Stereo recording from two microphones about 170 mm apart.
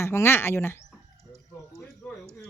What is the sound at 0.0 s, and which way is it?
Speech, 15° left (ahead or behind).